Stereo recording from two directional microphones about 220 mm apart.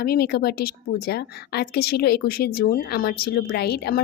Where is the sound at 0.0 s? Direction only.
45° left (ahead or behind).